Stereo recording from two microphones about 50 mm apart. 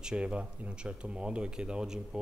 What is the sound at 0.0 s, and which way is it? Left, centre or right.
Speech, right.